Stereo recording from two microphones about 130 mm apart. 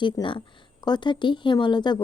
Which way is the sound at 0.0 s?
40° left (ahead or behind).